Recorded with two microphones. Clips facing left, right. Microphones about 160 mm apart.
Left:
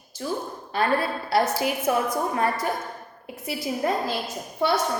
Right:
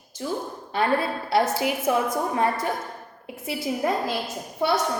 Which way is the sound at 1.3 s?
20° right (ahead or behind).